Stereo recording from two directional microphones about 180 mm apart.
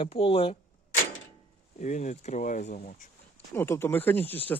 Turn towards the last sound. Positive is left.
turn(degrees=10)  # may be behind; listen again after turning